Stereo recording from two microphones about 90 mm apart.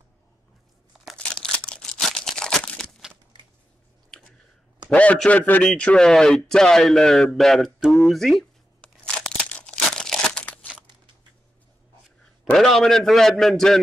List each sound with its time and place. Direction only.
1.1 s a sound: 10° left (ahead or behind)
4.8 s a man's voice: 15° left (ahead or behind)
8.8 s crumpling: 15° left (ahead or behind)
10.4 s crunch: 20° left (ahead or behind)
12.5 s a man's voice: centre (ahead or behind)